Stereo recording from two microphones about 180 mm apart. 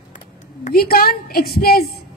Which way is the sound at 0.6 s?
55° left (ahead or behind).